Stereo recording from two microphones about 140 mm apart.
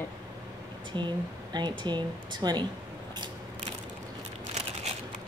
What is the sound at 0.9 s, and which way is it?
Speech, 35° right (ahead or behind).